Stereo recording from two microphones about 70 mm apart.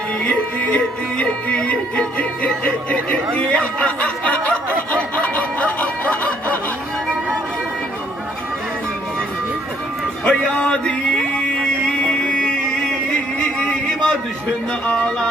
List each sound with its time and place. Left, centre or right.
0.2 s music: left
3.3 s snicker: centre
10.2 s a sound: centre
14.9 s music: centre